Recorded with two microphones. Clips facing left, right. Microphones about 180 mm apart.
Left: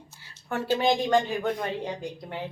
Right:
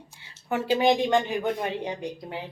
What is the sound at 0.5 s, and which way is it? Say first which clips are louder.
Speech: right 2 dB; 10° right (ahead or behind).